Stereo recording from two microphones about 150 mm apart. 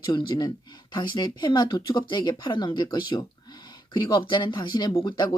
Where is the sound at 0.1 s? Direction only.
30° left (ahead or behind).